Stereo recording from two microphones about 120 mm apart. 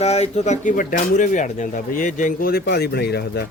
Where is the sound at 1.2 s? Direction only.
90° left.